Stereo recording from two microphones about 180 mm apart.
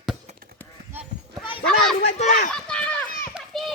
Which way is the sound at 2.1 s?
40° left (ahead or behind).